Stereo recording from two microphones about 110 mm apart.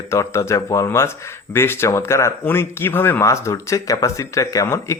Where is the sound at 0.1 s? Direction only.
25° left (ahead or behind).